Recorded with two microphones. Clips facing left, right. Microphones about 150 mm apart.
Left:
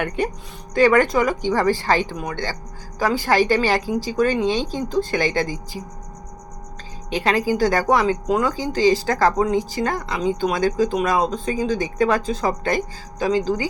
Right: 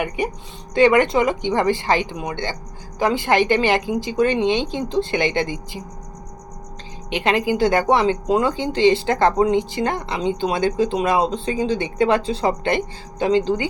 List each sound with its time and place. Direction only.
0.2 s speech: 15° right (ahead or behind)
7.1 s speech: 20° right (ahead or behind)